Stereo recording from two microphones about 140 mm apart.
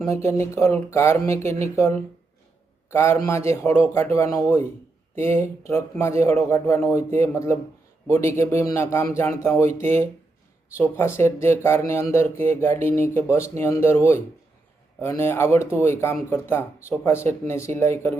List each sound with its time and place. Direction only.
0.1 s a man's voice: 20° left (ahead or behind)